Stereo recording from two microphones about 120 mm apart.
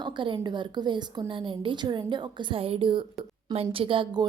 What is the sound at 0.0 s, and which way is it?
A woman's voice, 40° right (ahead or behind).